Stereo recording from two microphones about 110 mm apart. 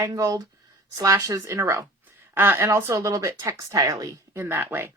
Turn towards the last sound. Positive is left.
turn(degrees=-20)  # may be behind; listen again after turning